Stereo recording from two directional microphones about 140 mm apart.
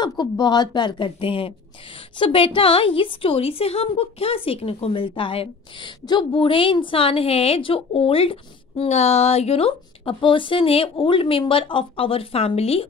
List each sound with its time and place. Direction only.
0.0 s a woman's voice: 30° left (ahead or behind); by 12.8 s 45° left (ahead or behind)